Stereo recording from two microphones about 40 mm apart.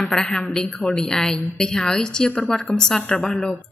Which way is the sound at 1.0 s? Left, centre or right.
Centre.